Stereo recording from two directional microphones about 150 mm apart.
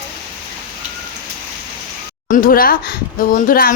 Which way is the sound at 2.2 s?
70° left (ahead or behind).